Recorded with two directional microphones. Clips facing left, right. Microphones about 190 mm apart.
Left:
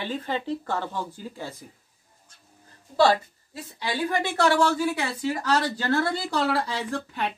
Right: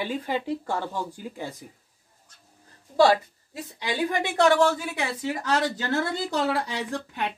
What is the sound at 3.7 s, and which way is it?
A woman's voice, 20° right (ahead or behind).